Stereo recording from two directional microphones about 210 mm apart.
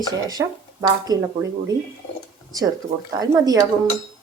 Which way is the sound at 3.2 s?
15° right (ahead or behind).